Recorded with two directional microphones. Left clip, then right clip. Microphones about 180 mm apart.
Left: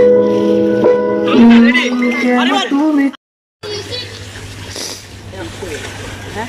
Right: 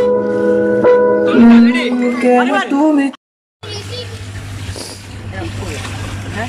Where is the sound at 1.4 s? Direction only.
15° right (ahead or behind).